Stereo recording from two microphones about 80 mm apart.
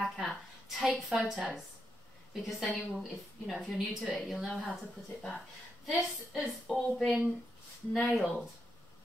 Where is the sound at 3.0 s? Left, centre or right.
Centre.